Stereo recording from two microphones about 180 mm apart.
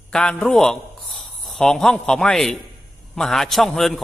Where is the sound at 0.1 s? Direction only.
5° left (ahead or behind).